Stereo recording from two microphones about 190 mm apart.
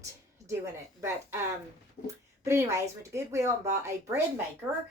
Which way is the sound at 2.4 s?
15° right (ahead or behind).